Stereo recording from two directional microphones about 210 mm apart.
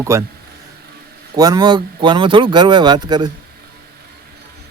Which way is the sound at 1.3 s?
20° right (ahead or behind).